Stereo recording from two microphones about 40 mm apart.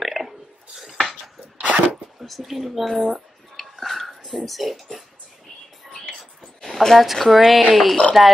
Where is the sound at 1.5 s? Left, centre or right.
Right.